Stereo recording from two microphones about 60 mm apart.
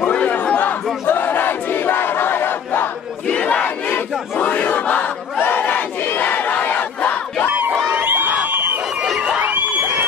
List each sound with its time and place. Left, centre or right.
0.0 s crowd: left
1.0 s battle cry: left
3.3 s crowd: left
7.9 s a sound: right